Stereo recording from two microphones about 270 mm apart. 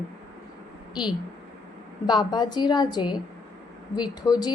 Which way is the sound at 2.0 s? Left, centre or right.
Centre.